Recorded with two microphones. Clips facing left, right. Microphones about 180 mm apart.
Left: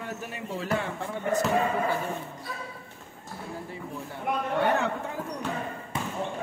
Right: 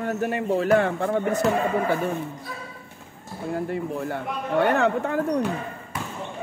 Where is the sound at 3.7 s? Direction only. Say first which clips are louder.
Right 10 dB; 70° right (ahead or behind).